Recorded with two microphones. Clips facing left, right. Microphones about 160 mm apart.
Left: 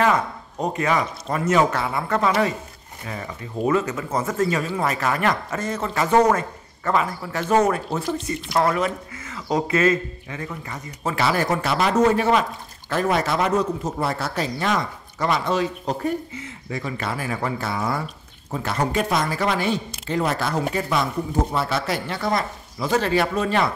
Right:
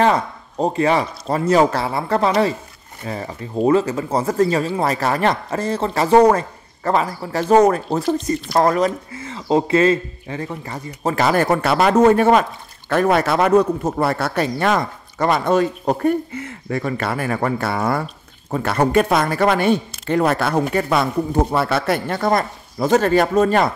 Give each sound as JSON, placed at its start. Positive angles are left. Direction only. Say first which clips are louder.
{"t": 0.0, "sound": "a man's voice", "louder": "right 3 dB", "side_deg": -30}